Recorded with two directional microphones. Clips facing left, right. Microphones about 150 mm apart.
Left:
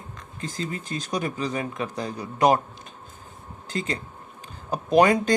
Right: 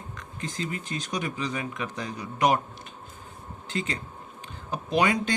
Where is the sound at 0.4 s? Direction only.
35° left (ahead or behind).